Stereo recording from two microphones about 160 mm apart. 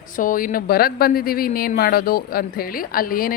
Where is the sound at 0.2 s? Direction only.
60° left (ahead or behind).